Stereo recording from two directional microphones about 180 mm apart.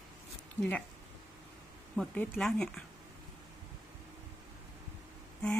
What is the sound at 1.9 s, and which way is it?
Speech, 5° left (ahead or behind).